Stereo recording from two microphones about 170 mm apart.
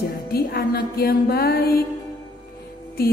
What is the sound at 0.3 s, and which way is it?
Music, 65° left (ahead or behind).